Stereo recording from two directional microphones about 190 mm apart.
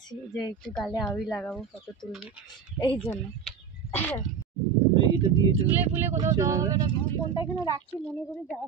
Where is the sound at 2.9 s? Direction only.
5° left (ahead or behind).